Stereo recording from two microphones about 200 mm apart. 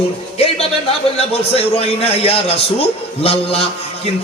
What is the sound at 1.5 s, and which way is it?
A man's voice, 30° left (ahead or behind).